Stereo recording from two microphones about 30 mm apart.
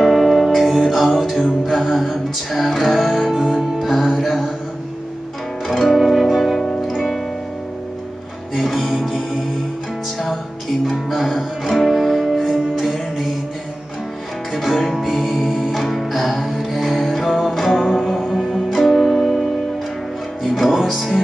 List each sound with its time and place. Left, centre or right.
0.0 s music: centre
3.3 s music: right
3.8 s music: centre
5.7 s music: centre
8.5 s music: centre
10.9 s music: centre
14.5 s music: centre
18.5 s music: centre
20.4 s music: centre